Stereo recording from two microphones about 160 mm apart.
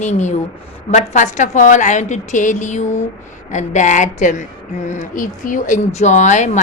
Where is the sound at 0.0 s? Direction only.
50° left (ahead or behind).